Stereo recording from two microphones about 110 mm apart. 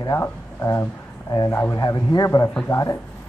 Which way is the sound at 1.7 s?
40° left (ahead or behind).